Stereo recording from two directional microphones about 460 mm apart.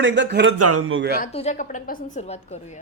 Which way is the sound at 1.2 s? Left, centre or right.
Centre.